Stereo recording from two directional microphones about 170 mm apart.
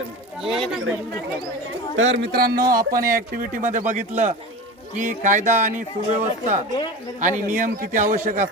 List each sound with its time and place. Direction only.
0.4 s speech: centre (ahead or behind)
2.0 s speech: 90° right; by 8.4 s 50° right (ahead or behind)